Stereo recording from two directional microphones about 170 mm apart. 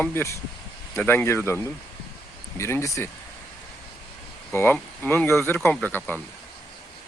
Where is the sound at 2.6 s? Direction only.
15° left (ahead or behind).